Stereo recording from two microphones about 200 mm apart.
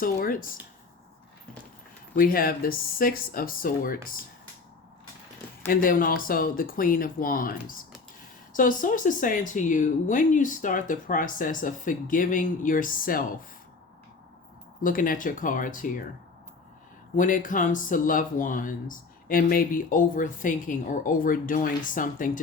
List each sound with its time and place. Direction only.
0.0 s speech: 45° left (ahead or behind)
2.1 s speech: 45° left (ahead or behind)
5.6 s speech: 45° left (ahead or behind)
14.8 s speech: 45° left (ahead or behind)
17.2 s speech: 40° left (ahead or behind)